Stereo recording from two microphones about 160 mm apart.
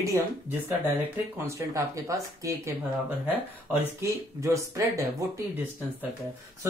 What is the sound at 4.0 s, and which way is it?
Speech, 20° right (ahead or behind).